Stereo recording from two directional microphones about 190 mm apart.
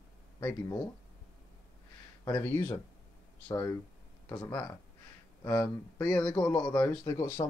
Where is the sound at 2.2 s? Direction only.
15° left (ahead or behind).